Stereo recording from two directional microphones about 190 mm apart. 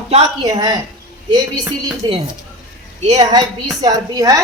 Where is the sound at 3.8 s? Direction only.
20° right (ahead or behind).